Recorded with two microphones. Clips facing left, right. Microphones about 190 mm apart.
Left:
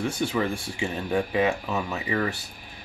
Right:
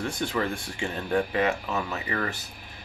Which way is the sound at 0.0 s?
10° left (ahead or behind).